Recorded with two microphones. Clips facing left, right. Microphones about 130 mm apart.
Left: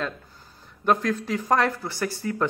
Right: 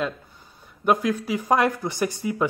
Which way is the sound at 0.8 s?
10° right (ahead or behind).